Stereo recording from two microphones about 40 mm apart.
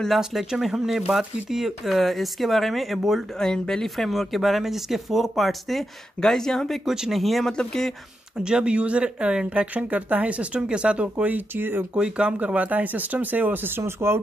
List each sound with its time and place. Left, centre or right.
0.2 s speech: centre
3.3 s speech: centre
3.9 s speech: centre
6.2 s speech: centre
6.9 s speech: centre
7.4 s speech: centre
8.4 s speech: right
11.2 s speech: right
12.0 s speech: right
12.4 s speech: right
13.7 s speech: right